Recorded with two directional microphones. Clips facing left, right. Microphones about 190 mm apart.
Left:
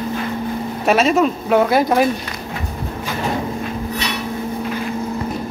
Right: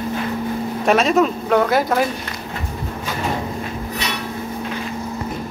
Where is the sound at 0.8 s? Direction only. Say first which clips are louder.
Left 1 dB; 5° left (ahead or behind).